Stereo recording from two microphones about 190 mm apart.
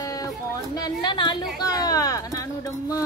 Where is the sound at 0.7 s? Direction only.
20° left (ahead or behind).